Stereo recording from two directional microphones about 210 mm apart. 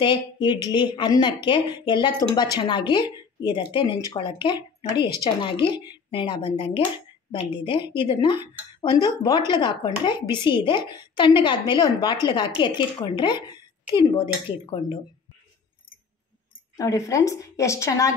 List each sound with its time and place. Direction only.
0.0 s speech: 20° left (ahead or behind)
16.7 s a woman's voice: 15° left (ahead or behind)